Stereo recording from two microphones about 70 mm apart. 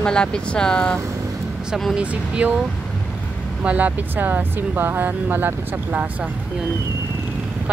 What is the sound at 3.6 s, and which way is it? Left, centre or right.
Speech, right.